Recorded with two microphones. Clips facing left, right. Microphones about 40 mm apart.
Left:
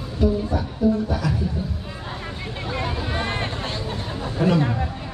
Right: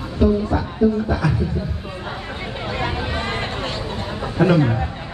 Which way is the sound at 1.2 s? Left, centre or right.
Centre.